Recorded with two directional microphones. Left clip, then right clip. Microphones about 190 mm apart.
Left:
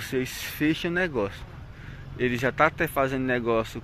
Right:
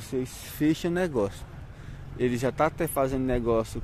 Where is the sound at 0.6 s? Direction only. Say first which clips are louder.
Even; 25° right (ahead or behind).